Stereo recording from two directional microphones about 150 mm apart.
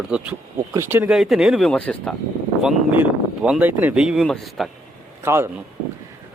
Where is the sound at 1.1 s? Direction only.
Centre (ahead or behind).